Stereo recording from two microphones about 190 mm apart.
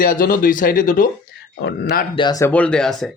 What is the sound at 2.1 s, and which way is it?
Speech, 20° left (ahead or behind).